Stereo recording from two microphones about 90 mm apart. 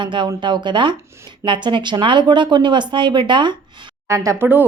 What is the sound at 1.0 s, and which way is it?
Speech, 30° right (ahead or behind).